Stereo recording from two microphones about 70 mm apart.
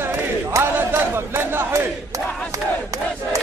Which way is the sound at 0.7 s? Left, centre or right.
Right.